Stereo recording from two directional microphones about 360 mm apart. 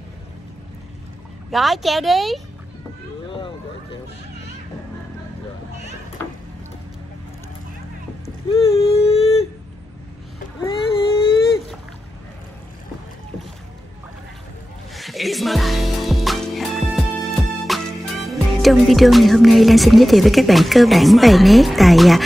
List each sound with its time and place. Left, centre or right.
1.5 s speech: centre
3.3 s vehicle: centre
8.5 s a sound: centre
10.6 s baby cry: centre
15.0 s music: centre